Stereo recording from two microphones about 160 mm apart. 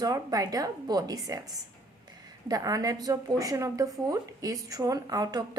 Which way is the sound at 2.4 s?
25° right (ahead or behind).